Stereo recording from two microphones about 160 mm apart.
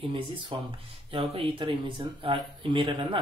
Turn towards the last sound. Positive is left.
turn(degrees=-30)  # may be behind; listen again after turning